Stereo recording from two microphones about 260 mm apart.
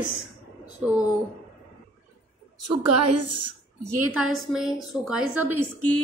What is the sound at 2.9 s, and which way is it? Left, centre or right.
Speech, right.